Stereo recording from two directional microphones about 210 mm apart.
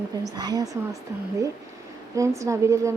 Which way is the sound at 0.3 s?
20° right (ahead or behind).